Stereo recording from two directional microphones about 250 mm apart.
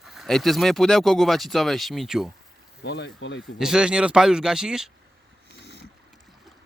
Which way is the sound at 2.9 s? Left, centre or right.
Left.